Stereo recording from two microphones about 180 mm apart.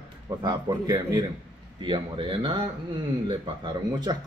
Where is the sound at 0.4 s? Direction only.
25° right (ahead or behind).